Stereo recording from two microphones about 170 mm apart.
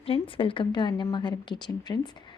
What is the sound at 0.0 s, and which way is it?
A woman's voice, 35° left (ahead or behind).